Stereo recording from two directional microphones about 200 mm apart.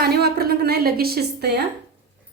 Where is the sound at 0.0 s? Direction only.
55° right (ahead or behind).